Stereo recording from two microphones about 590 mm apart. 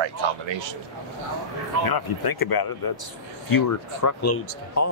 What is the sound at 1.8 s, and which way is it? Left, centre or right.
Speech, left.